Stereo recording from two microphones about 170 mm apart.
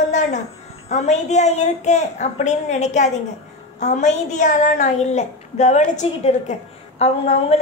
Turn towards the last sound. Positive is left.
turn(degrees=35)  # may be behind; listen again after turning